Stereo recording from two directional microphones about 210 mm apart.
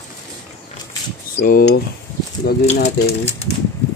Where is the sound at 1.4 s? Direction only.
45° left (ahead or behind).